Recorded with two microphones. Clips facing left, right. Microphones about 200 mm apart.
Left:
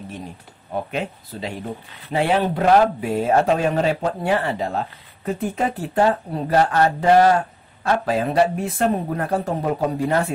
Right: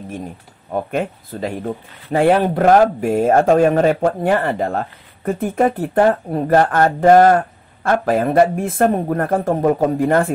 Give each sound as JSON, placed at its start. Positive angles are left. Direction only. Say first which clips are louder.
{"t": 0.7, "sound": "speech", "louder": "right 5 dB", "side_deg": -50}